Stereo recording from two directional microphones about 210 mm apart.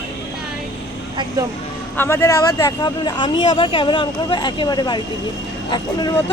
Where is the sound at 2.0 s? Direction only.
10° left (ahead or behind).